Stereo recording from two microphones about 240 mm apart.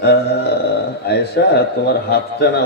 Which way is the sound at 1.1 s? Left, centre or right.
Left.